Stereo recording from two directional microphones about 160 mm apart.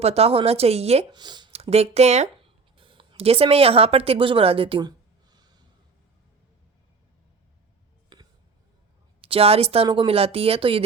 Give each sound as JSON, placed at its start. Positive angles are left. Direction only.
{"t": 0.0, "sound": "speech", "side_deg": -40}
{"t": 1.1, "sound": "speech", "side_deg": -25}
{"t": 8.1, "sound": "a sound", "side_deg": -25}
{"t": 9.2, "sound": "speech", "side_deg": -35}